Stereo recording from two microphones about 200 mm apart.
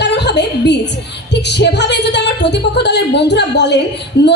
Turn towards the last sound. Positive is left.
turn(degrees=60)  # may be behind; listen again after turning